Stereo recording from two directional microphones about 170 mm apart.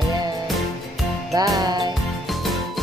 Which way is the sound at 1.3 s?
25° right (ahead or behind).